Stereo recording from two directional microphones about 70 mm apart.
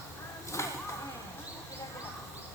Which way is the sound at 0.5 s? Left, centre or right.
Left.